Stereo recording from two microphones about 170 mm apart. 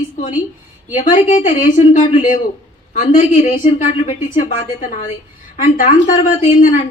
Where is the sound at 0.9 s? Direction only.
50° left (ahead or behind).